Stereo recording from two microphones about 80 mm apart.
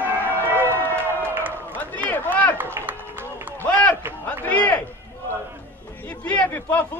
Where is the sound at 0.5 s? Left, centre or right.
Right.